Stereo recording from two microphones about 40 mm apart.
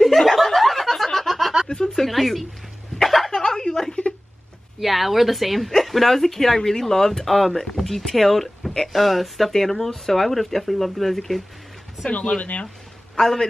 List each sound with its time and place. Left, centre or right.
0.0 s snicker: centre
1.7 s a sound: centre
3.0 s chuckle: centre
4.7 s a woman's voice: centre
12.4 s speech: left
13.2 s a man's voice: centre